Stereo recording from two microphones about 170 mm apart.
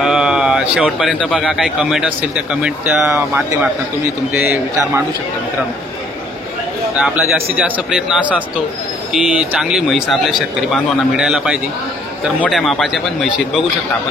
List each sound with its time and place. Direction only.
0.0 s a man's voice: 5° right (ahead or behind)
7.0 s a man's voice: 5° right (ahead or behind)